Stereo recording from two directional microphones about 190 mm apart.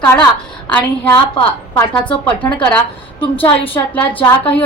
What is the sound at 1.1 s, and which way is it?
Speech, 15° left (ahead or behind).